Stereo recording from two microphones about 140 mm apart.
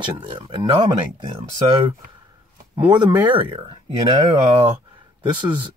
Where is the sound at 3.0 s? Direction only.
35° right (ahead or behind).